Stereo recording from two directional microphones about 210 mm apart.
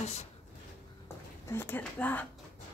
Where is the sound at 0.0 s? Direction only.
30° left (ahead or behind).